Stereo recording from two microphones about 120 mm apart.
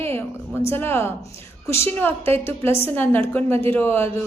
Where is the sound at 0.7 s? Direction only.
20° left (ahead or behind).